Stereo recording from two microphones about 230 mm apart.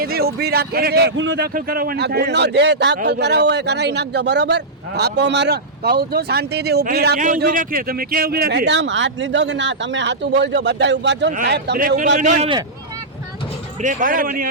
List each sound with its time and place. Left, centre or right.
0.0 s a man's voice: right
13.8 s a man's voice: right